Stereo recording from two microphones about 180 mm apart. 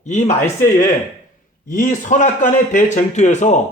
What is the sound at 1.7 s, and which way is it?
A man's voice, 45° left (ahead or behind).